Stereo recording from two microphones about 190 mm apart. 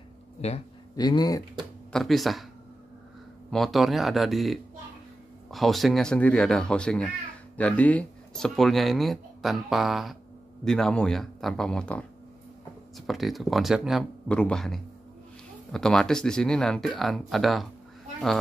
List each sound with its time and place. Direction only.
0.9 s speech: 20° left (ahead or behind)
1.9 s speech: centre (ahead or behind)
3.5 s speech: centre (ahead or behind)